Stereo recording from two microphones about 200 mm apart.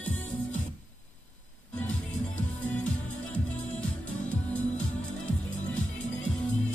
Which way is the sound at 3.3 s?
5° left (ahead or behind).